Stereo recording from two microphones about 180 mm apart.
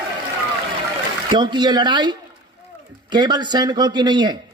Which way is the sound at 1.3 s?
25° right (ahead or behind).